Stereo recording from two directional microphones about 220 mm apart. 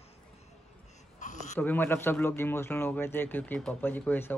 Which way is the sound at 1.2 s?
35° left (ahead or behind).